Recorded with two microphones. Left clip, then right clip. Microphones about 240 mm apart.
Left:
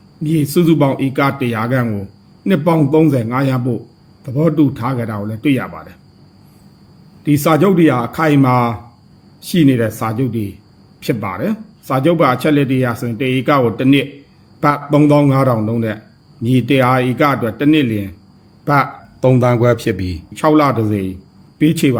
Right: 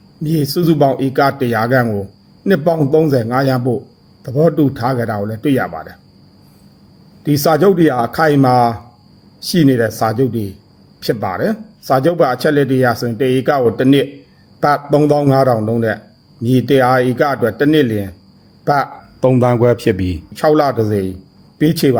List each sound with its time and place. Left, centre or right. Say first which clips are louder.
0.3 s speech: left 1 dB; right
7.3 s speech: right 1 dB; centre